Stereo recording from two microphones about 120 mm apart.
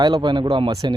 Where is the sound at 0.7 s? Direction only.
30° right (ahead or behind).